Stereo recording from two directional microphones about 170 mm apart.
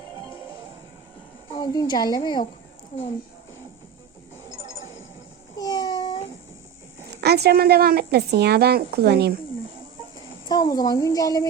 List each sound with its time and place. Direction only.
1.5 s a woman's voice: 25° left (ahead or behind)
5.5 s a sound: 20° left (ahead or behind)
7.2 s a woman's voice: 70° right (ahead or behind)
10.5 s a woman's voice: 25° left (ahead or behind)